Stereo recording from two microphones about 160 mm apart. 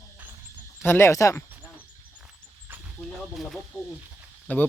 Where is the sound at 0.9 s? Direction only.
15° left (ahead or behind).